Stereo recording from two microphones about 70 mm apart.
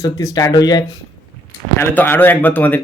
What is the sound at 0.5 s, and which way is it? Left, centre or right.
Speech, left.